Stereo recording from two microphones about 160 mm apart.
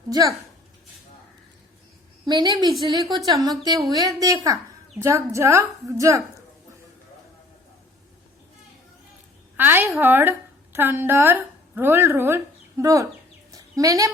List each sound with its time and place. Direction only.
0.1 s a woman's voice: 20° right (ahead or behind)
2.2 s a woman's voice: 30° right (ahead or behind)
9.6 s a woman's voice: 10° right (ahead or behind)
13.5 s chicken: 20° right (ahead or behind)